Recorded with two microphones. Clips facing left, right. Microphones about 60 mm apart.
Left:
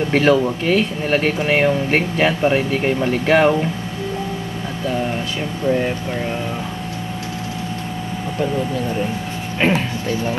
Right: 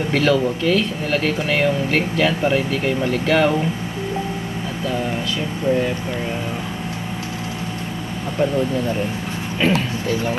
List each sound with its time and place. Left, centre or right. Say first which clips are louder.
0.1 s speech: left 2 dB; left
9.6 s speech: left 1 dB; left